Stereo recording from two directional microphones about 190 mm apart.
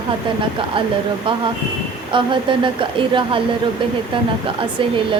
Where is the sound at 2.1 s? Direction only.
25° right (ahead or behind).